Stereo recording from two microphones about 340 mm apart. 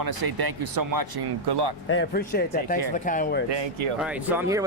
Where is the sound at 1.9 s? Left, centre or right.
Left.